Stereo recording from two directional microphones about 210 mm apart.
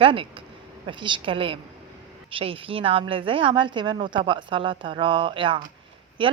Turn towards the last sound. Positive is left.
turn(degrees=-25)  # may be behind; listen again after turning